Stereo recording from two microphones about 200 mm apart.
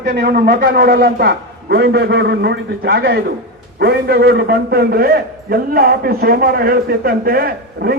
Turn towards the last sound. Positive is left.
turn(degrees=-50)  # may be behind; listen again after turning